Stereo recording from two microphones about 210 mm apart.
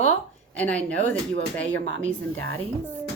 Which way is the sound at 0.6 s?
5° left (ahead or behind).